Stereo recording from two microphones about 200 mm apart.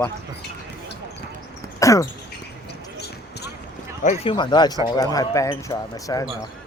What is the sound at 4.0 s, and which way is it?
Speech, 35° left (ahead or behind).